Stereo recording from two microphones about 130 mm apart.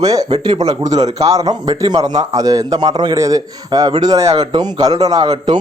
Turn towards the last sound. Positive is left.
turn(degrees=-35)  # may be behind; listen again after turning